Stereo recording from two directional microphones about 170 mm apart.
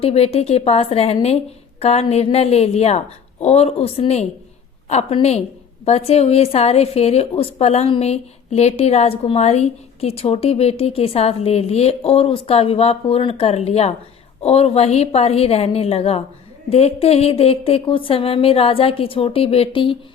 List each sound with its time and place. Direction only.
0.0 s a woman's voice: 35° left (ahead or behind)